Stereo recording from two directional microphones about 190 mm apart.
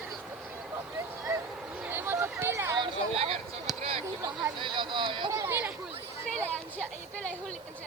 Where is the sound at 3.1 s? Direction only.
30° right (ahead or behind); by 5.7 s 10° right (ahead or behind).